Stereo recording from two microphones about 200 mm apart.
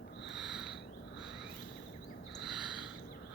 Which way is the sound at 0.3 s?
5° right (ahead or behind).